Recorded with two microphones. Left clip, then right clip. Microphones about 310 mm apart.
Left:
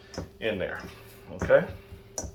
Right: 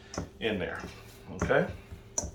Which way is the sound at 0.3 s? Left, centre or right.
Centre.